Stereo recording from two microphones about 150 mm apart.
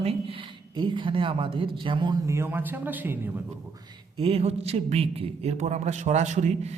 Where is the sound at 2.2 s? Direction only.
20° right (ahead or behind).